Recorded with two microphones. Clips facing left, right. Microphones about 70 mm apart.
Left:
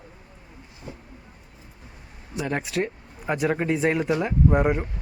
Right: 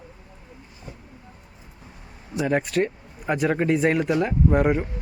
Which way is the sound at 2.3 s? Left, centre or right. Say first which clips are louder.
Right 4 dB; centre.